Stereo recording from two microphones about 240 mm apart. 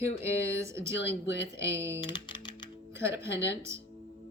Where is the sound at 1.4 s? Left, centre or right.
Centre.